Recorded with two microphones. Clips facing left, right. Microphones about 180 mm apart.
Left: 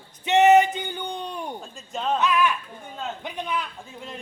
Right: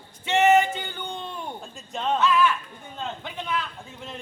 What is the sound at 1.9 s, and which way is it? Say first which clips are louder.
Speech: even; centre (ahead or behind).